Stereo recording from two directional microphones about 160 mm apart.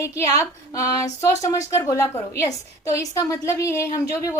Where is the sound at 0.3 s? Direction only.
20° left (ahead or behind).